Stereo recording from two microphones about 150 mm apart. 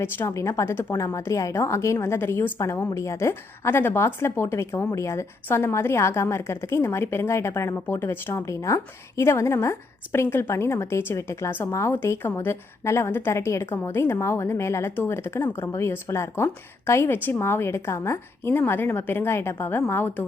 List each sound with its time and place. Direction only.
0.0 s a woman's voice: 15° left (ahead or behind)